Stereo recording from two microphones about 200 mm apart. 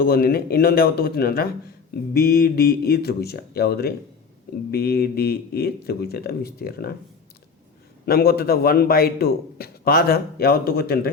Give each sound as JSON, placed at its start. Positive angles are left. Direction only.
{"t": 0.0, "sound": "speech", "side_deg": 50}
{"t": 8.0, "sound": "speech", "side_deg": 50}